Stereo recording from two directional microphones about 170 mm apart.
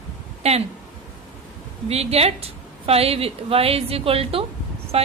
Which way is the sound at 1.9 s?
35° right (ahead or behind).